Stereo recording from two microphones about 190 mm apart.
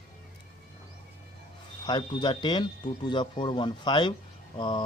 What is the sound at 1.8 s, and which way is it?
A man's voice, 25° left (ahead or behind).